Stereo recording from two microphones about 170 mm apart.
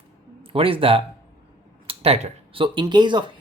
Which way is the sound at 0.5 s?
30° right (ahead or behind).